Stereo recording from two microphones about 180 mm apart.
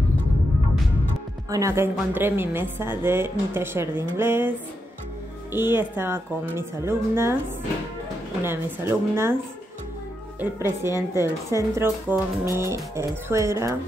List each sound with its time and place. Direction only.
1.5 s a woman's voice: 15° right (ahead or behind)
8.4 s a woman's voice: 15° right (ahead or behind)
10.4 s a woman's voice: 15° right (ahead or behind)